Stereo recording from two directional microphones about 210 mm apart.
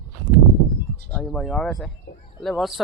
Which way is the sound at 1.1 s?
5° left (ahead or behind).